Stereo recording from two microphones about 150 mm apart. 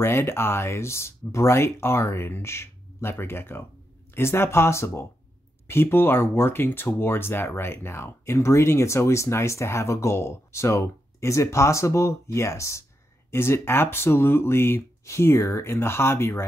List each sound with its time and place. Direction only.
0.0 s speech: 15° left (ahead or behind)